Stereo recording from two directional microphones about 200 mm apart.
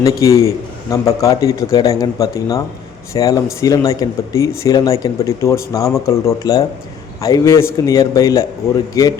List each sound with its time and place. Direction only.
0.0 s speech: 15° left (ahead or behind)